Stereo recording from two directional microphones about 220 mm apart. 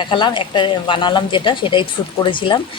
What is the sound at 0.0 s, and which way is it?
Speech, 20° left (ahead or behind).